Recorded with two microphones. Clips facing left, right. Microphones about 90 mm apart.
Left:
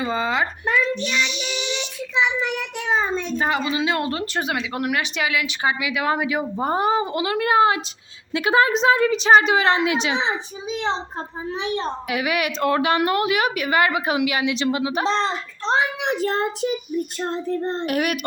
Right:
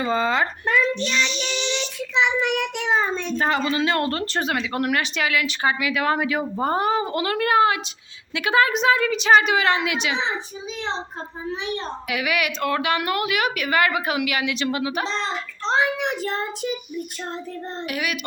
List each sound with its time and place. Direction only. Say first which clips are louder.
0.0 s a child's voice: right 1 dB; 10° left (ahead or behind)
2.2 s a child's voice: right 3 dB; centre (ahead or behind); by 7.8 s 20° left (ahead or behind)
8.3 s a woman's voice: left 2 dB; 35° left (ahead or behind)
11.5 s a child's voice: left 4 dB; 30° left (ahead or behind)
17.7 s speech: left 5 dB; 50° left (ahead or behind)